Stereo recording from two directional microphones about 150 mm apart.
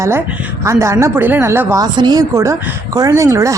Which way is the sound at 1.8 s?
30° right (ahead or behind).